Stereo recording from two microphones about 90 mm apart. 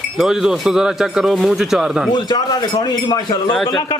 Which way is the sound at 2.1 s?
55° left (ahead or behind).